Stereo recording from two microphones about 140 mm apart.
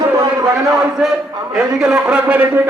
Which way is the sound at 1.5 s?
5° right (ahead or behind).